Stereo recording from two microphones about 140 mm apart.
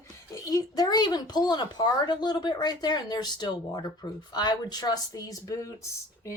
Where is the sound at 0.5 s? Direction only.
30° left (ahead or behind).